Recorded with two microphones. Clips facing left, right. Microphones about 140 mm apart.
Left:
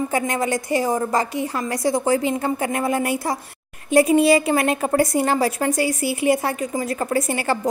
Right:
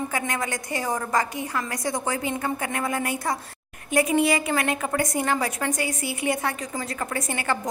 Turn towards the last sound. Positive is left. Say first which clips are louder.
# left 6 dB
turn(degrees=30)  # may be behind; listen again after turning